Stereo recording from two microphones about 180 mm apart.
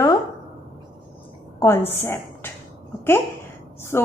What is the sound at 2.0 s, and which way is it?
Speech, 15° left (ahead or behind).